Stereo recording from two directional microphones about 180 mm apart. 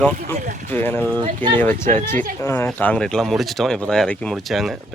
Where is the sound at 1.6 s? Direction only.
10° left (ahead or behind).